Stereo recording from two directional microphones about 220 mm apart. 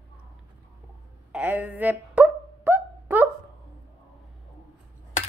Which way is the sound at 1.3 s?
5° right (ahead or behind).